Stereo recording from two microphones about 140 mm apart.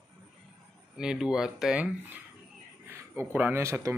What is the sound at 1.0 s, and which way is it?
Speech, 5° right (ahead or behind).